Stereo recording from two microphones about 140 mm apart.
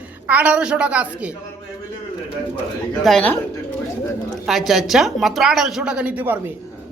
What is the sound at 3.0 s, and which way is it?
Speech, 5° left (ahead or behind).